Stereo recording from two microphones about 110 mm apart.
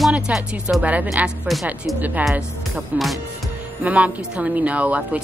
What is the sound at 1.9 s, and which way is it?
A woman's voice, centre (ahead or behind).